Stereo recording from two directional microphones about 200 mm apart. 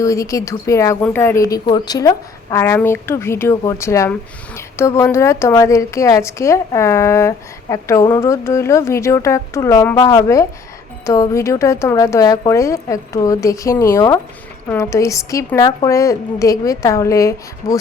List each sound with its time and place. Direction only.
0.0 s a woman's voice: 15° left (ahead or behind)